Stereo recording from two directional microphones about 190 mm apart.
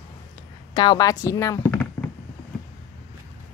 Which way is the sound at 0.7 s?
20° left (ahead or behind).